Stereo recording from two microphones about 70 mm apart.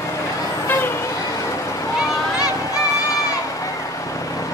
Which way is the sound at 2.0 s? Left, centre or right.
Left.